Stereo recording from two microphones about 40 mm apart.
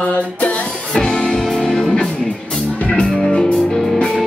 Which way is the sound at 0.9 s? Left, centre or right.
Centre.